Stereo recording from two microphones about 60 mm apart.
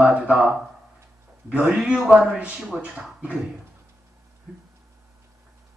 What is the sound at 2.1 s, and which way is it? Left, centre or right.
Speech, centre.